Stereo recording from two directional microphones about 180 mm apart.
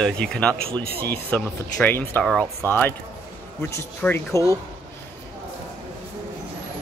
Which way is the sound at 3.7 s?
15° left (ahead or behind).